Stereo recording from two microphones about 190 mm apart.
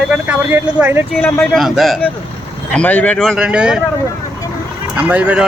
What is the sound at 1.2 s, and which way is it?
Speech, 10° left (ahead or behind).